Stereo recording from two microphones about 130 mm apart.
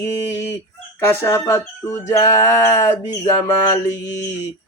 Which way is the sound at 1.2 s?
20° left (ahead or behind).